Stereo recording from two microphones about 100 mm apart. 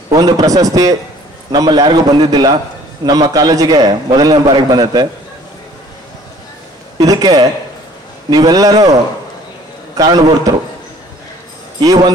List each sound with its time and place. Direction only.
0.1 s a man's voice: 40° right (ahead or behind)
7.0 s a man's voice: 40° right (ahead or behind)
9.9 s a man's voice: 40° right (ahead or behind)
11.8 s a man's voice: 40° right (ahead or behind)